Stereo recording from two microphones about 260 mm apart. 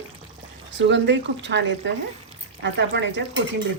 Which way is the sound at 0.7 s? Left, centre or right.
Right.